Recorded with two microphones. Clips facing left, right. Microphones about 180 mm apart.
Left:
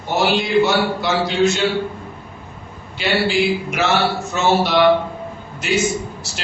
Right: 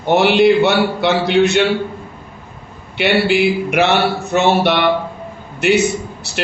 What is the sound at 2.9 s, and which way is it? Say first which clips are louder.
A man's voice: right 4 dB; 65° right (ahead or behind).